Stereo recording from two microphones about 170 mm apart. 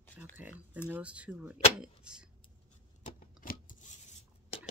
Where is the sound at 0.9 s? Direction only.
5° right (ahead or behind).